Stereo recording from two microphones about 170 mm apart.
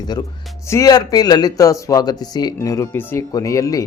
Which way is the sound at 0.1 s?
25° left (ahead or behind).